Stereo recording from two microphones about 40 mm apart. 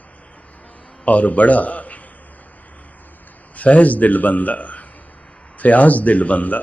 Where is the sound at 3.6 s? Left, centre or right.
Left.